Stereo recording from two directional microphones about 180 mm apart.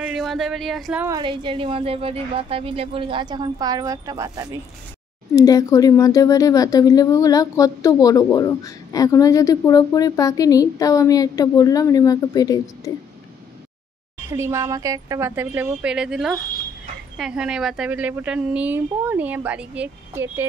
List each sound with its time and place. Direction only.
0.0 s speech: centre (ahead or behind)
1.0 s speech: 25° right (ahead or behind)
5.3 s speech: 20° left (ahead or behind)
14.3 s speech: 15° right (ahead or behind)